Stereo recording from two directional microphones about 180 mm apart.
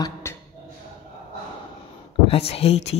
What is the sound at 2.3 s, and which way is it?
Speech, 35° left (ahead or behind).